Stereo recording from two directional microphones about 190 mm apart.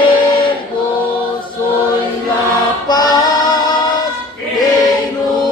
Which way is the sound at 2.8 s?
20° left (ahead or behind).